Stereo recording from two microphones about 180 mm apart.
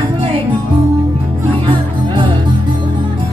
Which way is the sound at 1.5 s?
30° right (ahead or behind).